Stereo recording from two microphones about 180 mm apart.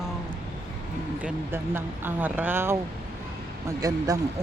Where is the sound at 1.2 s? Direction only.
10° right (ahead or behind).